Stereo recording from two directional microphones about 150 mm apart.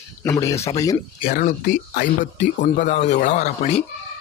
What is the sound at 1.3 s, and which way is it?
Speech, 65° left (ahead or behind).